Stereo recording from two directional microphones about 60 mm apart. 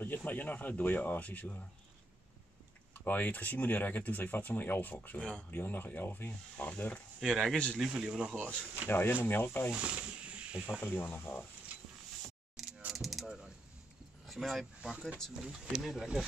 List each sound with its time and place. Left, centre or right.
0.0 s speech: left
2.9 s speech: left
6.6 s speech: left
7.2 s speech: centre
7.5 s speech: centre
7.8 s speech: centre
8.8 s speech: left
9.7 s speech: right
11.0 s speech: left
12.6 s camera: centre
12.9 s mechanisms: centre
14.2 s speech: centre
14.8 s speech: centre
15.4 s speech: centre